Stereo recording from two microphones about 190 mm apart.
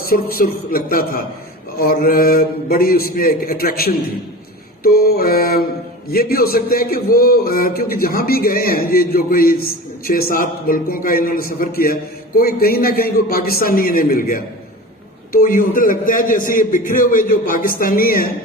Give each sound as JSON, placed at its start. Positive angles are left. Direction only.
{"t": 0.0, "sound": "a man's voice", "side_deg": 50}